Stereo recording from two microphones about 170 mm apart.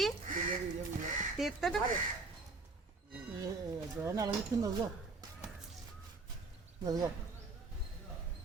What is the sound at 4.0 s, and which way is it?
Speech, 20° right (ahead or behind).